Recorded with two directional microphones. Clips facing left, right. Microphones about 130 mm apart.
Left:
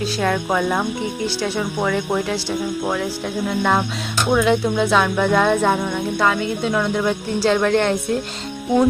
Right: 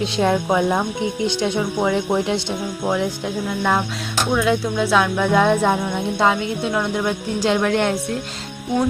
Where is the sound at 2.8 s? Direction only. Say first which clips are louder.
Right 1 dB; 15° right (ahead or behind).